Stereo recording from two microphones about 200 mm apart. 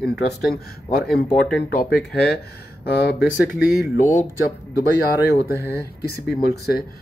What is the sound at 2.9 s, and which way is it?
Speech, 55° left (ahead or behind).